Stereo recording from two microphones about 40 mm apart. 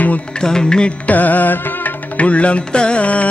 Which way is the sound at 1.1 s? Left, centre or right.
Left.